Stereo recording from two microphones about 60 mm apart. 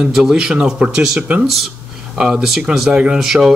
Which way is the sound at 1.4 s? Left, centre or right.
Centre.